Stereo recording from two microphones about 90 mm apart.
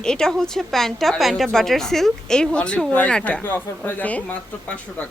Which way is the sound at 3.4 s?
20° left (ahead or behind).